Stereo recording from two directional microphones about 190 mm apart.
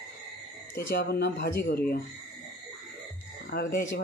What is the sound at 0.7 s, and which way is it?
Speech, 55° left (ahead or behind).